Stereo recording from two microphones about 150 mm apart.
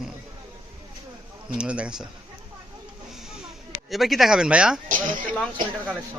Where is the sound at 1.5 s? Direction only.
5° right (ahead or behind).